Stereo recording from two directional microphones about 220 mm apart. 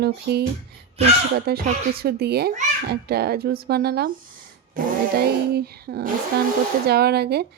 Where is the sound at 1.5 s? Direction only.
45° right (ahead or behind).